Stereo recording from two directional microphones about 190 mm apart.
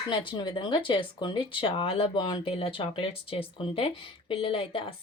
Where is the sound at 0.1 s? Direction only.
25° left (ahead or behind).